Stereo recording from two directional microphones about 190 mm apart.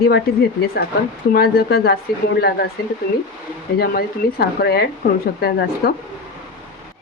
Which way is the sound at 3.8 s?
55° left (ahead or behind).